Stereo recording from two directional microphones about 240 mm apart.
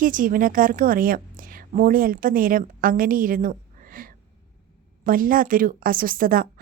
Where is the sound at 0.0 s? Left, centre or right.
Right.